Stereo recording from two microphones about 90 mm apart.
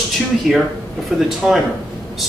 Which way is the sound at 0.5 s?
Centre (ahead or behind).